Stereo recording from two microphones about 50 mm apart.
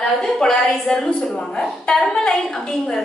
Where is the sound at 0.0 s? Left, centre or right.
Centre.